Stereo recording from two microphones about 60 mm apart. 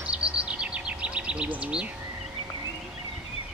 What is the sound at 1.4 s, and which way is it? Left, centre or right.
Bird, right.